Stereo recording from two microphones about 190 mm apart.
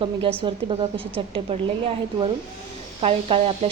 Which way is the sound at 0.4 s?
30° right (ahead or behind).